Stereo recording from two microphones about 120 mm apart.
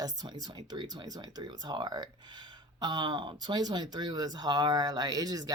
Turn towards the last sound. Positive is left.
turn(degrees=-30)  # may be behind; listen again after turning